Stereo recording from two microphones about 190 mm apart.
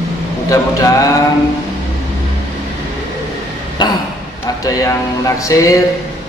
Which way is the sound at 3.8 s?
20° left (ahead or behind).